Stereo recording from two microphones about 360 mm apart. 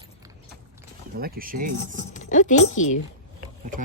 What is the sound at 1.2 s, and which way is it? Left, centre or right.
Speech, right.